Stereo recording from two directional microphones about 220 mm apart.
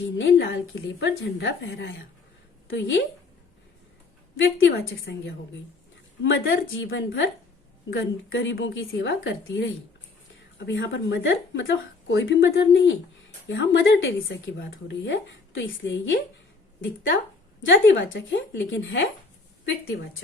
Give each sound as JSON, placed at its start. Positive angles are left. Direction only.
{"t": 0.2, "sound": "a woman's voice", "side_deg": 55}
{"t": 4.7, "sound": "a woman's voice", "side_deg": 50}
{"t": 17.6, "sound": "speech", "side_deg": 55}